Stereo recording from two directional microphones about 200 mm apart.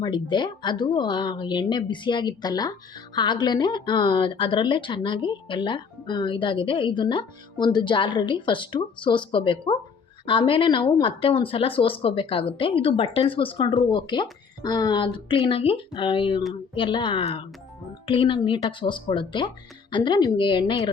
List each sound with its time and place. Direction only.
0.0 s speech: 25° left (ahead or behind)